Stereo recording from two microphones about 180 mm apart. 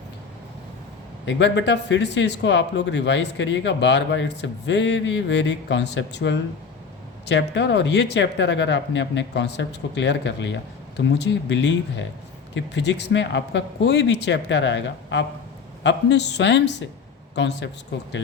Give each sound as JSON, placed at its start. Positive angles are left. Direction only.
{"t": 1.2, "sound": "speech", "side_deg": 85}